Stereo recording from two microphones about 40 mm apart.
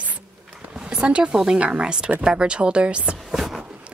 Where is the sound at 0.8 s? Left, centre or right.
Right.